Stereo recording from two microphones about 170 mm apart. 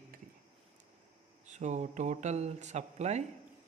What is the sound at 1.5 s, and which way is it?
Speech, 45° right (ahead or behind).